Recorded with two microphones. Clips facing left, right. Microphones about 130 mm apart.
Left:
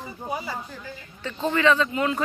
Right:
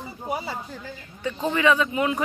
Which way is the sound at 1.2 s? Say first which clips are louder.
Even; 15° right (ahead or behind).